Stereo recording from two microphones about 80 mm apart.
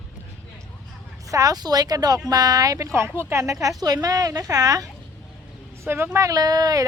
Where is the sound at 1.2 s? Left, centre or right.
Right.